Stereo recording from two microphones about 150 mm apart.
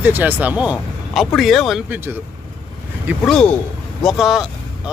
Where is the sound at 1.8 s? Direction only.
10° right (ahead or behind).